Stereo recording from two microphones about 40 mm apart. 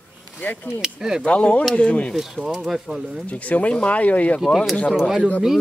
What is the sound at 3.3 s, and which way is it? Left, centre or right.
Speech, left.